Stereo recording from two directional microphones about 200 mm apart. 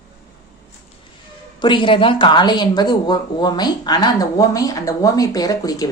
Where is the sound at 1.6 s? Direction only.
25° left (ahead or behind).